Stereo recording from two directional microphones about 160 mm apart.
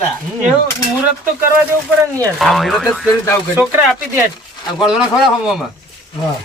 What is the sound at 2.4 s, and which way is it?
Speech, centre (ahead or behind).